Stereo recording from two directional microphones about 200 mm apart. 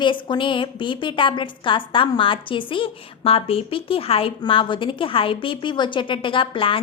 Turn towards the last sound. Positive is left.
turn(degrees=25)  # may be behind; listen again after turning